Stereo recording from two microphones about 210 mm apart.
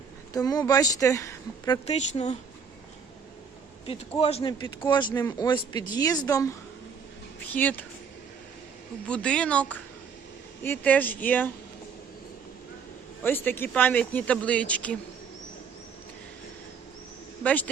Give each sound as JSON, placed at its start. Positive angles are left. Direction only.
{"t": 0.3, "sound": "speech", "side_deg": 15}
{"t": 2.0, "sound": "speech", "side_deg": 30}
{"t": 4.2, "sound": "a man's voice", "side_deg": 30}
{"t": 9.0, "sound": "speech", "side_deg": 5}
{"t": 13.2, "sound": "speech", "side_deg": 10}
{"t": 17.4, "sound": "speech", "side_deg": 10}